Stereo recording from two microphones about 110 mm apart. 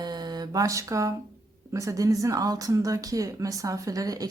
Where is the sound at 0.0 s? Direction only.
40° right (ahead or behind).